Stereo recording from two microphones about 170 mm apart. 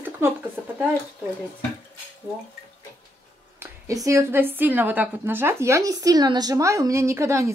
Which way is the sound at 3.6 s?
20° right (ahead or behind).